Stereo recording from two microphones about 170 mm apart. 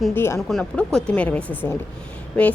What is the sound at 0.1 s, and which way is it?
Speech, 15° left (ahead or behind).